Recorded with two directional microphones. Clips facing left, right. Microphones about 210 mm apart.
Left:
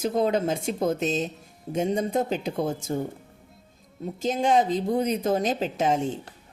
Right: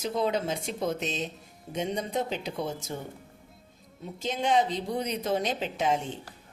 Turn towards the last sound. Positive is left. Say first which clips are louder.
# left 4 dB
turn(degrees=45)  # may be behind; listen again after turning